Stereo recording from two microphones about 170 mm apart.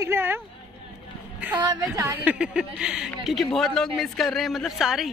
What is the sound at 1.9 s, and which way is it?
A woman's voice, 10° right (ahead or behind).